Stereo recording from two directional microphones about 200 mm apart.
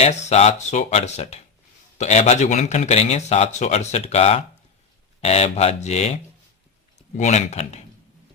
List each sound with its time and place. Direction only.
0.0 s a man's voice: 35° left (ahead or behind)
7.2 s a man's voice: 35° left (ahead or behind)